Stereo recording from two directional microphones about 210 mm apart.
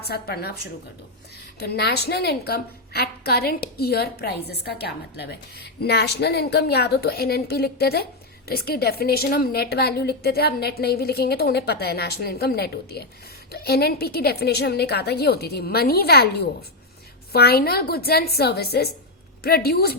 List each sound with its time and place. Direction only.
0.0 s a woman's voice: 50° left (ahead or behind)